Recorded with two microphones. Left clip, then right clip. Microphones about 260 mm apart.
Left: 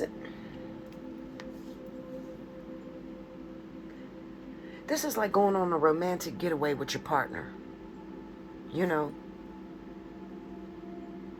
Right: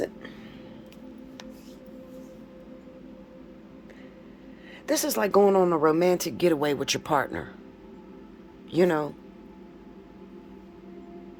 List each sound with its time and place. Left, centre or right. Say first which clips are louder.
4.9 s a woman's voice: right 5 dB; right
8.7 s a woman's voice: right 6 dB; right